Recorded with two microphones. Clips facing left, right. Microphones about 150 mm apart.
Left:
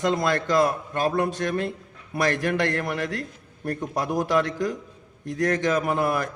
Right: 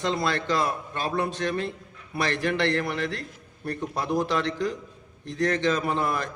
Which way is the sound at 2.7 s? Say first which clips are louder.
Left 1 dB; 15° left (ahead or behind).